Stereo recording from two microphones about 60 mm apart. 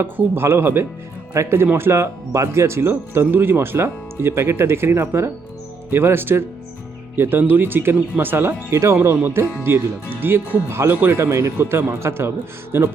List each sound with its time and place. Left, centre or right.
0.2 s speech: right
1.3 s speech: right
11.2 s speech: right